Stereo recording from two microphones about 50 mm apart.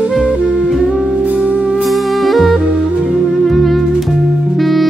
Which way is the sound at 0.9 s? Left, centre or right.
Centre.